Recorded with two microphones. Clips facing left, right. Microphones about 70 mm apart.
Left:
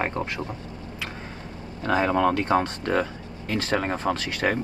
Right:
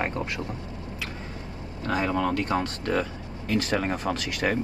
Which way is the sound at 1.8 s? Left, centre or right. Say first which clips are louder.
Left 4 dB; left.